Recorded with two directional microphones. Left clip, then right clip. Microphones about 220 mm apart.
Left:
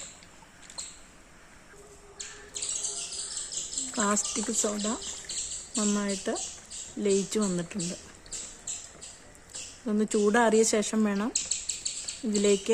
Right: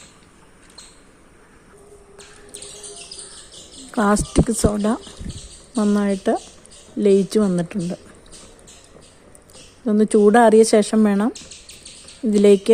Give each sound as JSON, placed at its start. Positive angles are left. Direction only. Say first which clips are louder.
{"t": 3.9, "sound": "speech", "louder": "right 11 dB", "side_deg": -25}
{"t": 9.8, "sound": "speech", "louder": "right 12 dB", "side_deg": -20}